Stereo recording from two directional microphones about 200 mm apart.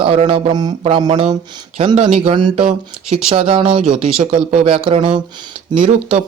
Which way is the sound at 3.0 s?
5° right (ahead or behind).